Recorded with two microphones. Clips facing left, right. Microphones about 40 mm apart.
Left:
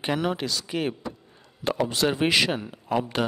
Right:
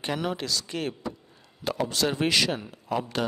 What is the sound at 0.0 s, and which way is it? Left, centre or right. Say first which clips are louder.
A man's voice: left 3 dB; centre.